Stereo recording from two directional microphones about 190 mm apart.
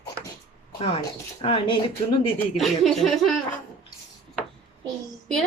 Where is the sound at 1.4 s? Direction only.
30° left (ahead or behind).